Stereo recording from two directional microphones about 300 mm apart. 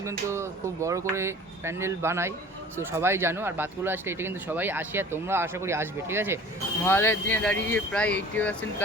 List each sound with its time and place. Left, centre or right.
0.0 s speech: centre
6.8 s speech: centre